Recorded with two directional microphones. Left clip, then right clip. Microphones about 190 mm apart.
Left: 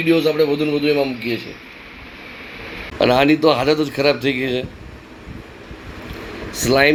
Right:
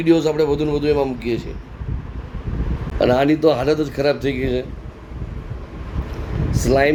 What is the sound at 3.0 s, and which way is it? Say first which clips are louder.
A man's voice: left 1 dB; 5° right (ahead or behind).